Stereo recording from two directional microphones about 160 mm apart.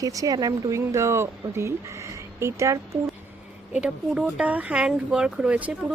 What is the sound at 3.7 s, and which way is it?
Speech, 5° right (ahead or behind).